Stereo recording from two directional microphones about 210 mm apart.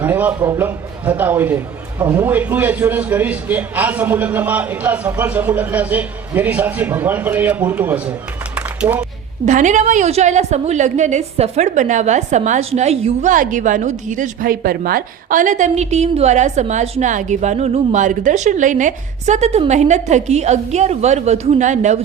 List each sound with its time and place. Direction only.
0.0 s a man's voice: 10° right (ahead or behind)
8.5 s a sound: 5° right (ahead or behind)
9.5 s a woman's voice: 35° right (ahead or behind)